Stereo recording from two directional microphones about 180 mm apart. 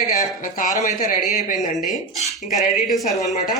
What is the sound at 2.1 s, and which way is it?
Speech, centre (ahead or behind).